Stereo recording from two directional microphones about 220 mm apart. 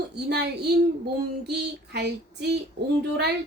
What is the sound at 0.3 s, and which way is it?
Speech, 50° right (ahead or behind).